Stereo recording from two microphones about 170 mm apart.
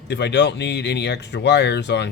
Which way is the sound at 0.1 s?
90° left.